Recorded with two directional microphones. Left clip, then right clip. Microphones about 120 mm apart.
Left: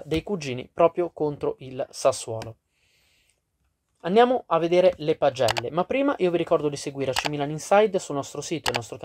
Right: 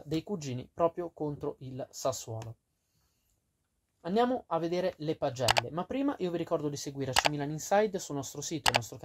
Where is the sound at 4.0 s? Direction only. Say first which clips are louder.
Left 10 dB; 15° left (ahead or behind).